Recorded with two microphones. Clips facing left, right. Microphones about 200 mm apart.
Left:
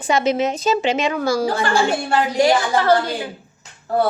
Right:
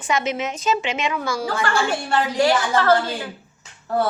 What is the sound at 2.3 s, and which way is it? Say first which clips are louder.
Speech: left 2 dB; 15° left (ahead or behind).